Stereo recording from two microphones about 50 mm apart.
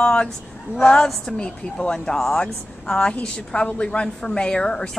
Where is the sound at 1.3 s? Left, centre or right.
Centre.